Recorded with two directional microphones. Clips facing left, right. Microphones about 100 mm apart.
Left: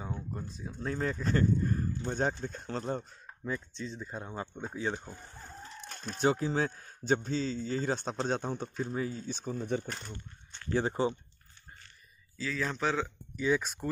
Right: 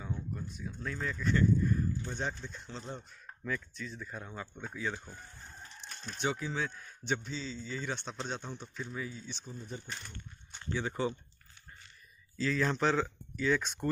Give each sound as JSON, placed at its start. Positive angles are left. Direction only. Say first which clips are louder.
{"t": 0.0, "sound": "speech", "louder": "left 1 dB", "side_deg": 30}
{"t": 3.4, "sound": "speech", "louder": "left 2 dB", "side_deg": 25}
{"t": 5.9, "sound": "chicken", "louder": "left 4 dB", "side_deg": 60}
{"t": 6.1, "sound": "speech", "louder": "left 6 dB", "side_deg": 40}
{"t": 10.9, "sound": "speech", "louder": "even", "side_deg": 30}
{"t": 12.4, "sound": "speech", "louder": "right 3 dB", "side_deg": 0}